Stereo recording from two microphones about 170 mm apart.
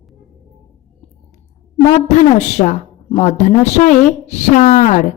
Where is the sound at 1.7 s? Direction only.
40° left (ahead or behind).